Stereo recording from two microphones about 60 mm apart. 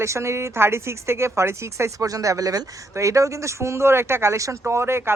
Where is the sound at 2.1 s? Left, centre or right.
Right.